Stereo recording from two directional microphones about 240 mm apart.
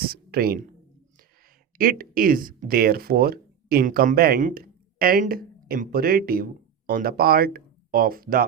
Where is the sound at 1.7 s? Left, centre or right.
Right.